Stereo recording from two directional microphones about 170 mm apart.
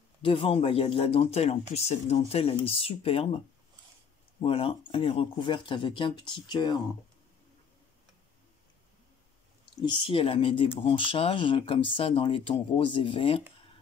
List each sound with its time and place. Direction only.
0.2 s speech: 30° left (ahead or behind)
4.4 s speech: 35° left (ahead or behind)
9.8 s speech: 30° left (ahead or behind)